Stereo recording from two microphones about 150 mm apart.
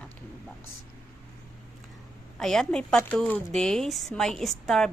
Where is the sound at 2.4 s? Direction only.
5° left (ahead or behind).